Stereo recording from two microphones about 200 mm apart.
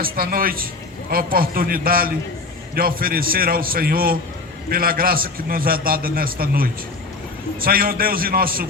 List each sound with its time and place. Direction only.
0.0 s a man's voice: 45° right (ahead or behind)